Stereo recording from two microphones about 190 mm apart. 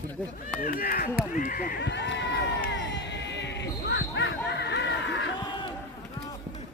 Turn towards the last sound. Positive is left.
turn(degrees=65)  # may be behind; listen again after turning